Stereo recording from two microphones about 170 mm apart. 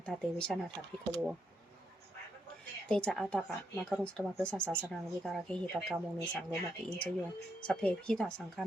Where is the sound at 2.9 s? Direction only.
5° left (ahead or behind).